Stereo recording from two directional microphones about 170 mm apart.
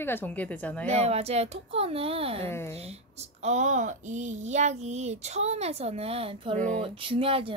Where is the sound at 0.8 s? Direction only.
40° right (ahead or behind).